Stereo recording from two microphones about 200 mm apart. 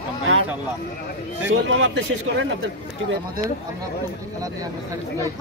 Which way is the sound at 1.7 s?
75° right (ahead or behind).